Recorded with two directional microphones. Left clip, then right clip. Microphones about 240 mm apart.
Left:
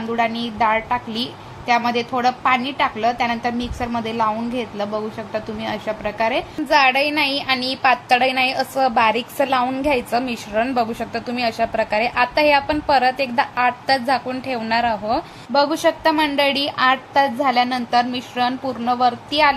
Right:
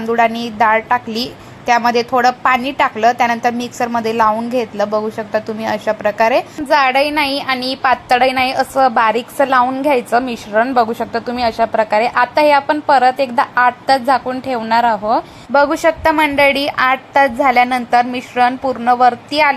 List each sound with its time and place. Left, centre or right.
0.1 s a woman's voice: right